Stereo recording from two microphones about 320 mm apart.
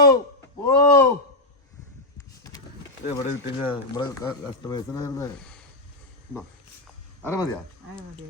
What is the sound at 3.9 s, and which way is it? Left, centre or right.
Speech, centre.